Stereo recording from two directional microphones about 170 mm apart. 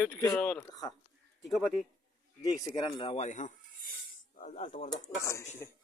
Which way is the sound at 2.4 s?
25° left (ahead or behind).